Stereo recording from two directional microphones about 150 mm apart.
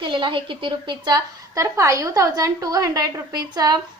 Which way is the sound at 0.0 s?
35° right (ahead or behind).